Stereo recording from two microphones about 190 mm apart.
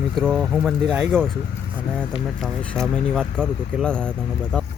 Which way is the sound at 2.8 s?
5° left (ahead or behind).